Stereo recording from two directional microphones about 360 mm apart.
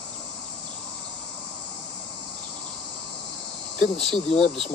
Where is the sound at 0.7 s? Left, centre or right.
Centre.